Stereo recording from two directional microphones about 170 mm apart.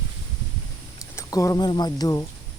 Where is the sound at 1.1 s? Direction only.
20° left (ahead or behind).